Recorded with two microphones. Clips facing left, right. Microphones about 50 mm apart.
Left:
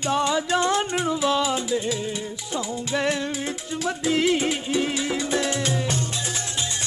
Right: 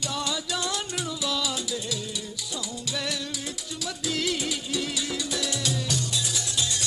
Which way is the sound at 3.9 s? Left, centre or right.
Left.